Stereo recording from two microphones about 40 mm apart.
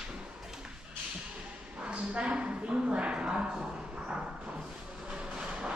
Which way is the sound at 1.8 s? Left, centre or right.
Right.